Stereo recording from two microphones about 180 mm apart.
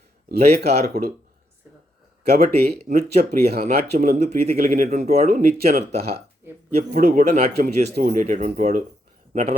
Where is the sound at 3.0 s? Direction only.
55° right (ahead or behind); by 5.3 s 35° right (ahead or behind).